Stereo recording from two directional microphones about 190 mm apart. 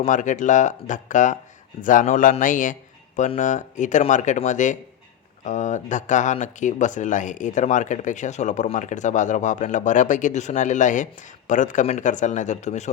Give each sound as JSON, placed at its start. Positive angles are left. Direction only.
{"t": 0.0, "sound": "speech", "side_deg": 40}